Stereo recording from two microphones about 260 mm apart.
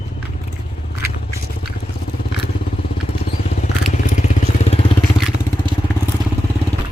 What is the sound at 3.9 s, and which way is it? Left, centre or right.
Vehicle, left.